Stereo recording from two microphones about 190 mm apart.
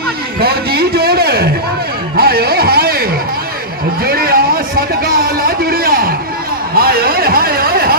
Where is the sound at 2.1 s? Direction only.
55° right (ahead or behind).